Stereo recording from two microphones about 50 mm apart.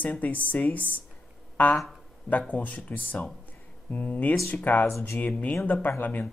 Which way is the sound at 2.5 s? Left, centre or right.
Left.